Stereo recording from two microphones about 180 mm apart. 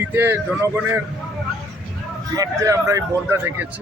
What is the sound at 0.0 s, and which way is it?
Speech, 10° right (ahead or behind).